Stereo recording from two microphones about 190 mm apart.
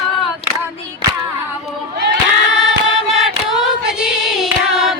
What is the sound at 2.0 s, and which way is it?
Crowd, 60° right (ahead or behind).